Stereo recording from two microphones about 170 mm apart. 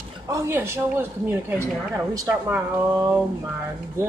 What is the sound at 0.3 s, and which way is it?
Speech, 15° right (ahead or behind).